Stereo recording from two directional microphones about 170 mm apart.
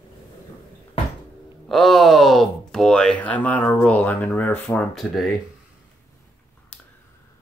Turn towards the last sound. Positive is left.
turn(degrees=5)  # may be behind; listen again after turning